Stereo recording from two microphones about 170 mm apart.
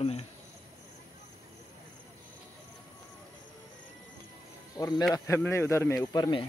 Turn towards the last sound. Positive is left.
turn(degrees=25)  # may be behind; listen again after turning